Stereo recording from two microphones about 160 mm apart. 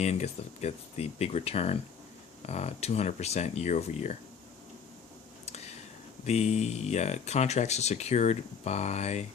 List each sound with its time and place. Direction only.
0.0 s speech: 45° left (ahead or behind)
6.2 s speech: 45° left (ahead or behind)